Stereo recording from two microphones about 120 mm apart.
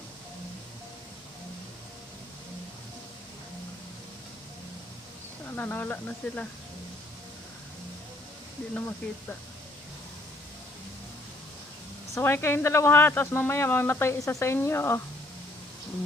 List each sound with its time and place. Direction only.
5.6 s speech: 15° left (ahead or behind)
8.7 s speech: 15° left (ahead or behind)
12.1 s a man's voice: 20° left (ahead or behind)